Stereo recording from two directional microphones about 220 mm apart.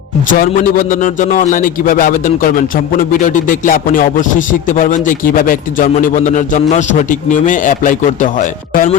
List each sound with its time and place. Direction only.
0.3 s a man's voice: 40° left (ahead or behind)